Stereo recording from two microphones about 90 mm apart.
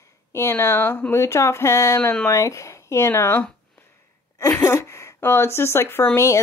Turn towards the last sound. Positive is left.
turn(degrees=35)  # may be behind; listen again after turning